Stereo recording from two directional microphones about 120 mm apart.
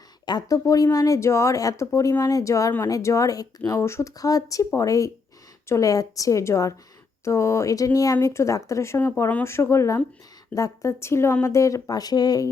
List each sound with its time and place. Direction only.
0.3 s speech: 35° left (ahead or behind)